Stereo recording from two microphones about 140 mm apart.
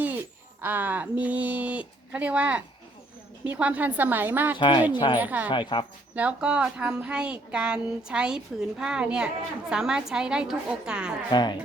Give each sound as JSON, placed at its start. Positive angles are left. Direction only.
{"t": 0.6, "sound": "speech", "side_deg": -10}
{"t": 4.5, "sound": "speech", "side_deg": 35}
{"t": 5.1, "sound": "speech", "side_deg": -10}
{"t": 5.5, "sound": "speech", "side_deg": 35}
{"t": 6.1, "sound": "a woman's voice", "side_deg": -10}
{"t": 11.3, "sound": "speech", "side_deg": 30}